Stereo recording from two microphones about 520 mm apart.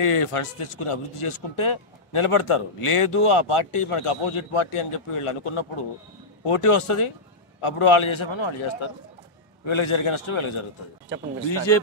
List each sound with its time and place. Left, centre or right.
0.0 s a man's voice: left
9.7 s a man's voice: left
11.4 s speech: left